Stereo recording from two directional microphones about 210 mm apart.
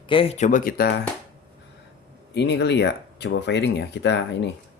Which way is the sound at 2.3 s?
55° left (ahead or behind).